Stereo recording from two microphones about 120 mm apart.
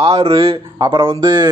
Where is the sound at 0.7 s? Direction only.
35° right (ahead or behind).